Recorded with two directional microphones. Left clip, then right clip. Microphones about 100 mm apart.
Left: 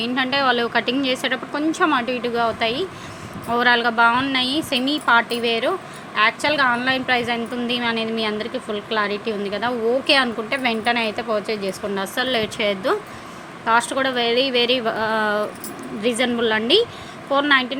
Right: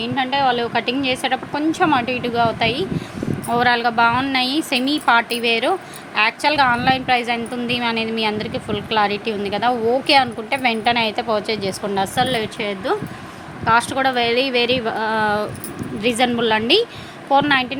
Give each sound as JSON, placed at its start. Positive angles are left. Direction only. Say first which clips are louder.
{"t": 0.0, "sound": "a woman's voice", "louder": "right 1 dB", "side_deg": 20}
{"t": 12.1, "sound": "a woman's voice", "louder": "even", "side_deg": 0}
{"t": 12.5, "sound": "speech", "louder": "left 1 dB", "side_deg": 15}
{"t": 13.7, "sound": "a woman's voice", "louder": "right 2 dB", "side_deg": -10}